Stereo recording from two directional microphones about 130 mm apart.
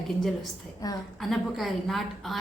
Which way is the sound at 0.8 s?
30° left (ahead or behind).